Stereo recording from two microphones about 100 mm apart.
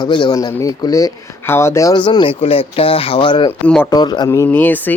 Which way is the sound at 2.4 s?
70° left (ahead or behind).